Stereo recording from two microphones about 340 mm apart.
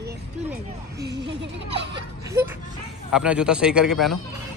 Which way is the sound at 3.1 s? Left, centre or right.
Centre.